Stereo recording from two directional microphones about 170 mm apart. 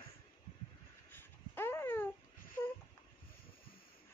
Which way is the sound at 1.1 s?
15° left (ahead or behind).